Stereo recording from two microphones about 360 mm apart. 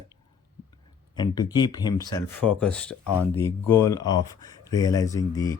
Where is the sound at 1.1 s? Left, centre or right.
Centre.